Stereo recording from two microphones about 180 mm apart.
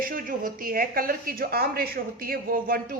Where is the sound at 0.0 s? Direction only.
50° right (ahead or behind).